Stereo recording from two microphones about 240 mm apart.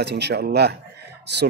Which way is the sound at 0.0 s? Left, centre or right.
Right.